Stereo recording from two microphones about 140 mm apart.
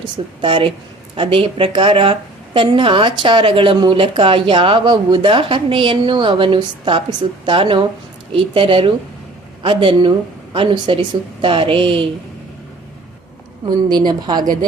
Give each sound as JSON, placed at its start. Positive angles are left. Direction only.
{"t": 0.4, "sound": "a woman's voice", "side_deg": -40}
{"t": 13.7, "sound": "a woman's voice", "side_deg": -30}